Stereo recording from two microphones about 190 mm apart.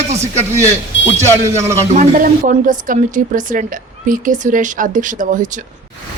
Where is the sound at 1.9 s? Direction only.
40° right (ahead or behind).